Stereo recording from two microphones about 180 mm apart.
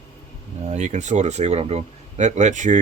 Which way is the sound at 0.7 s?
40° right (ahead or behind).